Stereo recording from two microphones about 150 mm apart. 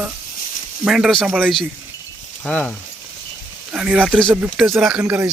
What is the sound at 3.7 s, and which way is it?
Speech, 5° right (ahead or behind).